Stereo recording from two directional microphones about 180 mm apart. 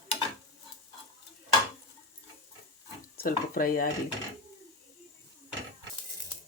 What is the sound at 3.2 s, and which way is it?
Dishes, 50° left (ahead or behind).